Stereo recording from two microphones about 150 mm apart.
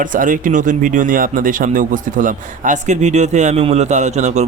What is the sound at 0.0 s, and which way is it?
Speech, 65° right (ahead or behind).